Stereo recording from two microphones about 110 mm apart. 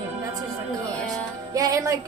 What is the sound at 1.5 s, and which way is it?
Speech, 30° right (ahead or behind).